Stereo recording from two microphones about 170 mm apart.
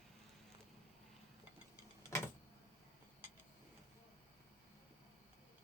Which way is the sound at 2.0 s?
15° left (ahead or behind).